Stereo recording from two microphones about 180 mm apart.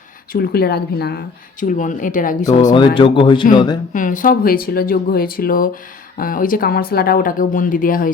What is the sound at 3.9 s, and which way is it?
Speech, 45° left (ahead or behind).